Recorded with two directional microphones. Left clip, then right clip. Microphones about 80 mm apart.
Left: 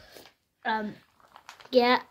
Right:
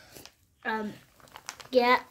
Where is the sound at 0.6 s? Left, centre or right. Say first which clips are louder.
Left 3 dB; left.